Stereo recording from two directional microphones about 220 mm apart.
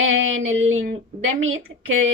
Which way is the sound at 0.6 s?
65° right (ahead or behind).